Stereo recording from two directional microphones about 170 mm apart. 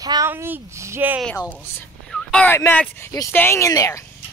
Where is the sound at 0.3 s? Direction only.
15° right (ahead or behind).